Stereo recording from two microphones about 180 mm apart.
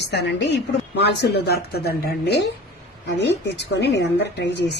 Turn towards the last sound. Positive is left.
turn(degrees=70)  # may be behind; listen again after turning